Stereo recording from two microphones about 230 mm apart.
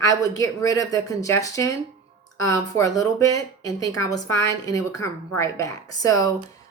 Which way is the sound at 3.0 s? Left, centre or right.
Centre.